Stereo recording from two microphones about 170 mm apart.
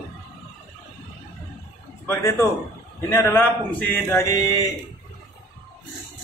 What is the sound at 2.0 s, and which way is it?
Speech, 20° left (ahead or behind).